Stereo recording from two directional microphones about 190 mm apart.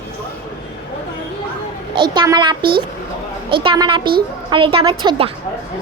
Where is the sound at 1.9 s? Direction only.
25° right (ahead or behind).